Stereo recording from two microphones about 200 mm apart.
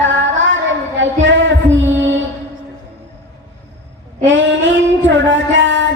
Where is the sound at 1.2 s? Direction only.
65° right (ahead or behind).